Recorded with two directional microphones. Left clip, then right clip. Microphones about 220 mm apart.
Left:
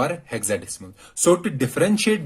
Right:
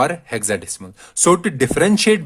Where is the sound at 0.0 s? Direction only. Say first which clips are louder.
Right 6 dB; 40° right (ahead or behind).